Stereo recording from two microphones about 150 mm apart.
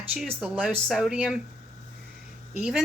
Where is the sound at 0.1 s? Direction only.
5° right (ahead or behind).